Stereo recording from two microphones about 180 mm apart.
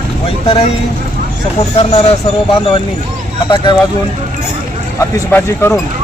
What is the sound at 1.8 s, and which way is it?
Speech, 35° left (ahead or behind).